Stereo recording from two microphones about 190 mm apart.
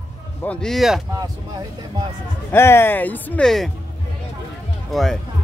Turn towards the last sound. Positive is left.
turn(degrees=0)  # may be behind; listen again after turning